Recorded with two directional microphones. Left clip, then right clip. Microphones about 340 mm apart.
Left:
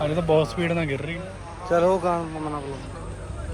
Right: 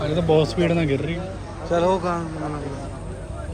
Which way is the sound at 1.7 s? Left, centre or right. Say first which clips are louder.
Even; centre.